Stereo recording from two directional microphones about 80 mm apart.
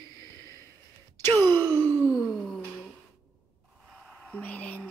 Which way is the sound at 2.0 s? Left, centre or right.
Centre.